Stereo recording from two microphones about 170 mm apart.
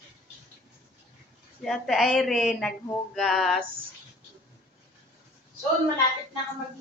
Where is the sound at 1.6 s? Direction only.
Centre (ahead or behind).